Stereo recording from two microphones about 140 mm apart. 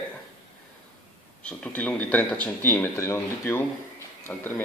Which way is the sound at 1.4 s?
10° left (ahead or behind).